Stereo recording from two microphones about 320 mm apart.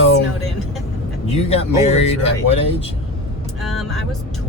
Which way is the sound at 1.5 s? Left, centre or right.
Centre.